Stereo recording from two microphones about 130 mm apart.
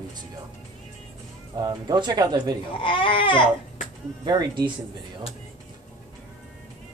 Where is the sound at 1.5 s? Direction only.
35° right (ahead or behind).